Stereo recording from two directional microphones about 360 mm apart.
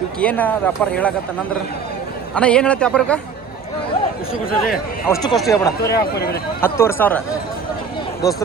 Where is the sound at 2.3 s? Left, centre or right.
Centre.